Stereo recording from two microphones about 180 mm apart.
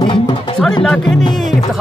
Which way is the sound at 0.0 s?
30° left (ahead or behind).